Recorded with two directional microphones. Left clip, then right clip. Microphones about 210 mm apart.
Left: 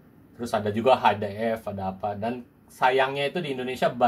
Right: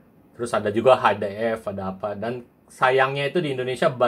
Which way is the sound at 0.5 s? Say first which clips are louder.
Right 4 dB; 25° right (ahead or behind).